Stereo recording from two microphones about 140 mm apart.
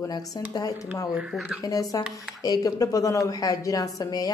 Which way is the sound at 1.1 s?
5° right (ahead or behind).